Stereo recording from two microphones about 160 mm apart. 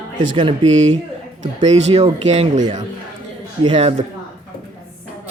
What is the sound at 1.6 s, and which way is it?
Speech, 45° right (ahead or behind).